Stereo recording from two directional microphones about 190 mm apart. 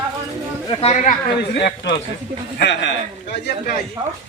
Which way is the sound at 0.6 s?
30° left (ahead or behind).